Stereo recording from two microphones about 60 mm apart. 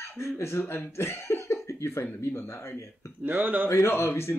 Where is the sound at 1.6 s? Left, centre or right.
Left.